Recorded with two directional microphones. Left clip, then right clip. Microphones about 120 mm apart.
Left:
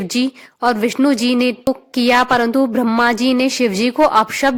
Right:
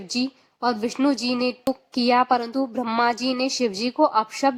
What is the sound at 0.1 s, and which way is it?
A woman's voice, 45° left (ahead or behind).